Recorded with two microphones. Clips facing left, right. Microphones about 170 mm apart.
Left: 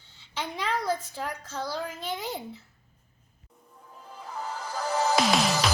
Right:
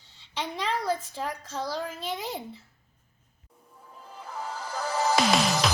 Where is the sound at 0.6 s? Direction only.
30° right (ahead or behind).